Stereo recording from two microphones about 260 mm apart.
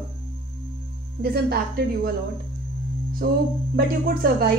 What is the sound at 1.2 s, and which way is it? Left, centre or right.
Speech, right.